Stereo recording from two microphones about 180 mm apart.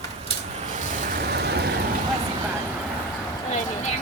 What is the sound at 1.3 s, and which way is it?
Vehicle, 65° right (ahead or behind).